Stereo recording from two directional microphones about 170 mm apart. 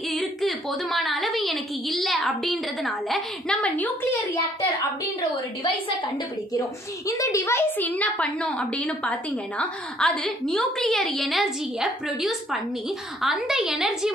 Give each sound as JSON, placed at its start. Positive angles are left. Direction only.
{"t": 0.1, "sound": "a woman's voice", "side_deg": 0}
{"t": 6.6, "sound": "a woman's voice", "side_deg": 20}